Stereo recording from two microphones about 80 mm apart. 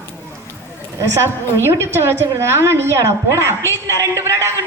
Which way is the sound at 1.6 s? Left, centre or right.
Right.